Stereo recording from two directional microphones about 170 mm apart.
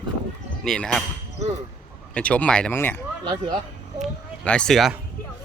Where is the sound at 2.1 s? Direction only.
5° left (ahead or behind).